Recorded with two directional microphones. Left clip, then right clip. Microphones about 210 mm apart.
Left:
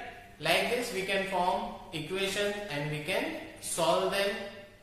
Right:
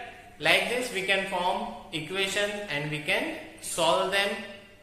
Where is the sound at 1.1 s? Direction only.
20° right (ahead or behind).